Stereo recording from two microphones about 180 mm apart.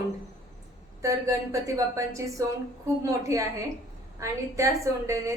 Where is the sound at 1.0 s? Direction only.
15° right (ahead or behind).